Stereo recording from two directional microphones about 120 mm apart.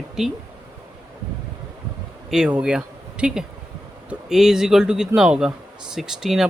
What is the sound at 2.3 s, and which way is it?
Speech, 5° right (ahead or behind).